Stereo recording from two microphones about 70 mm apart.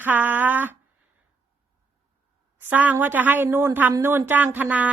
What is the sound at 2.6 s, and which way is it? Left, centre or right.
Speech, right.